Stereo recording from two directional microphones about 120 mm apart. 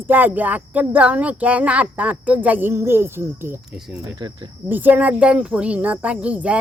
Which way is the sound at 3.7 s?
5° right (ahead or behind).